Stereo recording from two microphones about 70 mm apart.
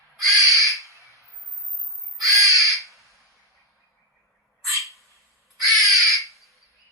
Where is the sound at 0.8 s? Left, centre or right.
Left.